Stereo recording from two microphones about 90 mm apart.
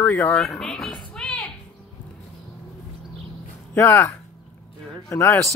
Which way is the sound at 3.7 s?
25° left (ahead or behind).